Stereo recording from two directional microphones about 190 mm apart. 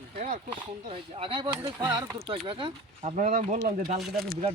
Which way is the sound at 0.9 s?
30° right (ahead or behind).